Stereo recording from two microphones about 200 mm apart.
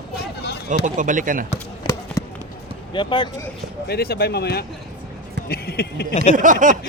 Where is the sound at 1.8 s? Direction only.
25° left (ahead or behind).